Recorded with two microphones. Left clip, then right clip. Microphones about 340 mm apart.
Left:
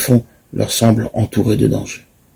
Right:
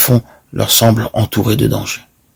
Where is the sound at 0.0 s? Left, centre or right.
Right.